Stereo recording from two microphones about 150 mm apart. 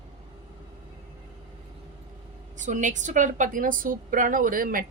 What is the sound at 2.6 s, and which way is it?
A woman's voice, 55° right (ahead or behind).